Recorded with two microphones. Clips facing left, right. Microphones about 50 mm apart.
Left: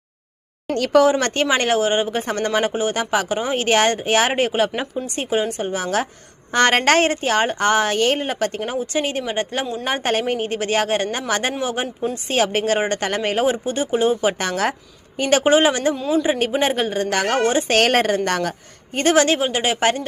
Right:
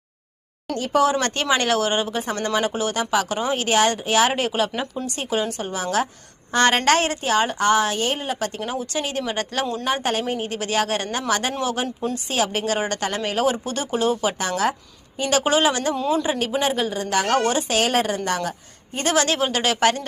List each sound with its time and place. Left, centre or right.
1.0 s speech: left
3.2 s speech: left
9.8 s speech: left
12.1 s speech: left
16.0 s a man's voice: centre
16.6 s speech: left
17.2 s speech: left
17.7 s speech: left
18.9 s speech: left
19.4 s speech: centre